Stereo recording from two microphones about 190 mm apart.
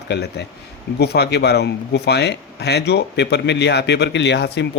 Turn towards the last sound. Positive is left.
turn(degrees=60)  # may be behind; listen again after turning